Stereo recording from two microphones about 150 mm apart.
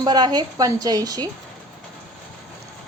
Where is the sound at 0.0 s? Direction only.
25° right (ahead or behind).